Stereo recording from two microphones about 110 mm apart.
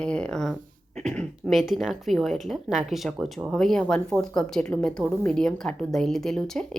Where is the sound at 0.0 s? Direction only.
10° left (ahead or behind).